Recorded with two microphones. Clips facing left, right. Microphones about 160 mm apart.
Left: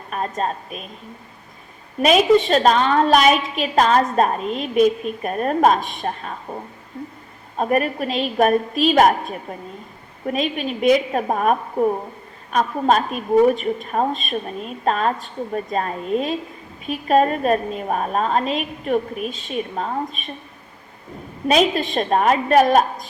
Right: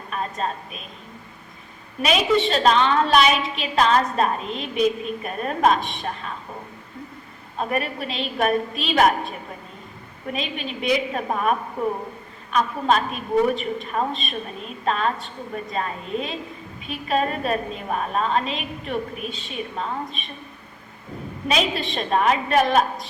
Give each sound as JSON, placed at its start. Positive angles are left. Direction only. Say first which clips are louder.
{"t": 0.1, "sound": "a woman's voice", "louder": "left 3 dB", "side_deg": 45}
{"t": 2.0, "sound": "a woman's voice", "louder": "left 6 dB", "side_deg": 45}
{"t": 7.6, "sound": "a woman's voice", "louder": "left 6 dB", "side_deg": 45}
{"t": 10.2, "sound": "a woman's voice", "louder": "left 6 dB", "side_deg": 45}
{"t": 19.1, "sound": "a woman's voice", "louder": "left 6 dB", "side_deg": 0}
{"t": 19.7, "sound": "a woman's voice", "louder": "left 4 dB", "side_deg": 45}
{"t": 21.4, "sound": "a woman's voice", "louder": "left 6 dB", "side_deg": 45}